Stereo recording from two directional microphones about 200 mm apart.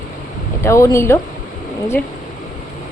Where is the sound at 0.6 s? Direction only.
15° left (ahead or behind).